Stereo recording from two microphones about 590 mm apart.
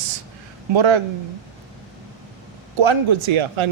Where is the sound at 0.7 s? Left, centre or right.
Right.